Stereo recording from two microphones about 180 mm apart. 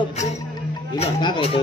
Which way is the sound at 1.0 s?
30° left (ahead or behind).